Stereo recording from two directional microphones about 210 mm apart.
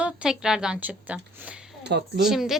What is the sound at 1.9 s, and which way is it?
Speech, 50° right (ahead or behind).